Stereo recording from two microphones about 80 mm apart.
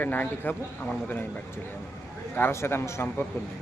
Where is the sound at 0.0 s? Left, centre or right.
Left.